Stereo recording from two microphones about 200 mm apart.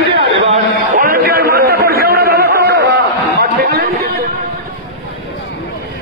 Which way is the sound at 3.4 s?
50° right (ahead or behind).